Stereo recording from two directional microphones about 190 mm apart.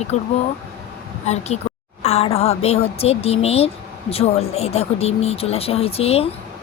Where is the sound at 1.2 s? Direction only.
35° left (ahead or behind).